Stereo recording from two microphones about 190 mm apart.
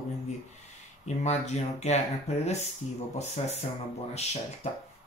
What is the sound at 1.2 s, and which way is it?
Speech, 35° left (ahead or behind).